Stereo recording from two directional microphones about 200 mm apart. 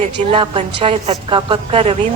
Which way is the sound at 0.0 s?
25° right (ahead or behind).